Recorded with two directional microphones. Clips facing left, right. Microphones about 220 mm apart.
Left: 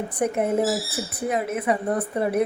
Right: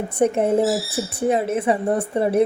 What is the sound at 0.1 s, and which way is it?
A woman's voice, 25° right (ahead or behind).